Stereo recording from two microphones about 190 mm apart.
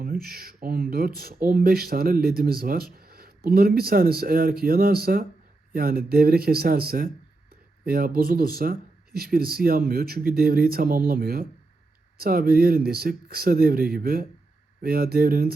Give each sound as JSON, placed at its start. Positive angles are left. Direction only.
{"t": 0.0, "sound": "speech", "side_deg": -50}